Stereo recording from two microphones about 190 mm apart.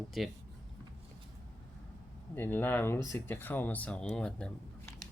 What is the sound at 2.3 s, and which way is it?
Speech, 10° left (ahead or behind).